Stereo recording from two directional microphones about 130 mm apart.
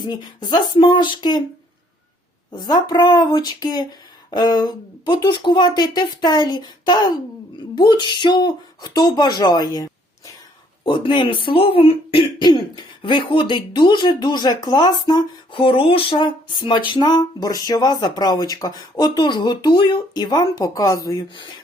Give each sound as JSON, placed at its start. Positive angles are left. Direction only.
{"t": 0.1, "sound": "speech", "side_deg": 35}
{"t": 2.5, "sound": "speech", "side_deg": 30}